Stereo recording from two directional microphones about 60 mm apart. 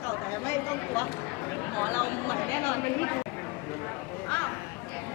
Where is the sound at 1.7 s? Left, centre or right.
Left.